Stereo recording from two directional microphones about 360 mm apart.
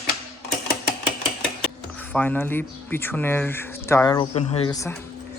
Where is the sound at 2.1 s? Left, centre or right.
Centre.